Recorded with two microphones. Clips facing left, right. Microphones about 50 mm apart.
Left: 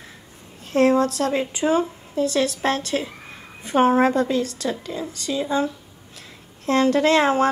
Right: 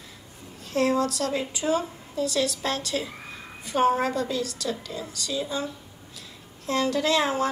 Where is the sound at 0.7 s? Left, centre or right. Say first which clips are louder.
Left 6 dB; left.